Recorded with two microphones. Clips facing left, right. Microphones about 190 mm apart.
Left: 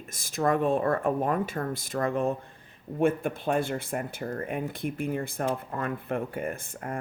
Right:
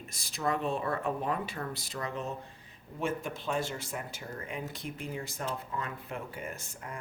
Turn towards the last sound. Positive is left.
turn(degrees=55)  # may be behind; listen again after turning